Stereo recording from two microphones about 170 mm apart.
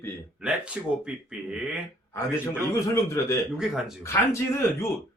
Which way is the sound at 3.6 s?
Centre (ahead or behind).